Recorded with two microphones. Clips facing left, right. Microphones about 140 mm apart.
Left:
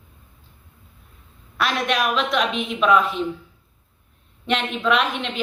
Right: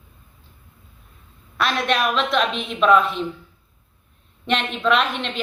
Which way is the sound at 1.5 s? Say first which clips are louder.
Right 1 dB; 10° left (ahead or behind).